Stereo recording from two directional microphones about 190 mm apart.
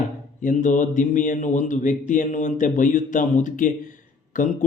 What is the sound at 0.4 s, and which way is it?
A man's voice, 40° left (ahead or behind).